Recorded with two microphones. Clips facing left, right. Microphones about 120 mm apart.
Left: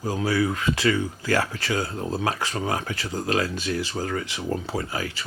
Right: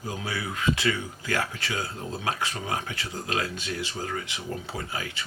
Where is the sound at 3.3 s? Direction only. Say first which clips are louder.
Left 6 dB; 35° left (ahead or behind).